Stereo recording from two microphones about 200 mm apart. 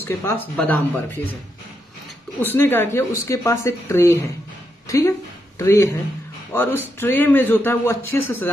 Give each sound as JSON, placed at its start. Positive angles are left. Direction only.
{"t": 0.0, "sound": "speech", "side_deg": 10}
{"t": 2.4, "sound": "speech", "side_deg": 10}
{"t": 4.8, "sound": "a sound", "side_deg": 15}
{"t": 5.6, "sound": "speech", "side_deg": 15}